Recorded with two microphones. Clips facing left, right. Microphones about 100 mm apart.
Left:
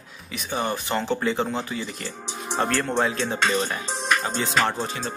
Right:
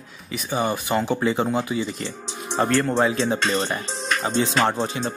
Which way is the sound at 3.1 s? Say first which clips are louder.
Right 2 dB; 20° right (ahead or behind).